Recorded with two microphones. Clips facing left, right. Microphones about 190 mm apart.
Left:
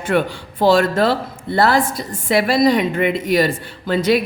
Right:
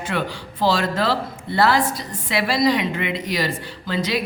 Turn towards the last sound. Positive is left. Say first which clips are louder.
# left 7 dB
turn(degrees=55)  # may be behind; listen again after turning